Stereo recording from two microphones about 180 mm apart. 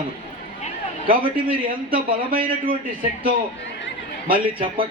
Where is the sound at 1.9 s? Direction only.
50° right (ahead or behind).